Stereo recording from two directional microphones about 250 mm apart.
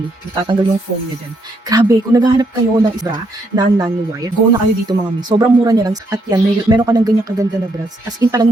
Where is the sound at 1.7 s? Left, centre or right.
Centre.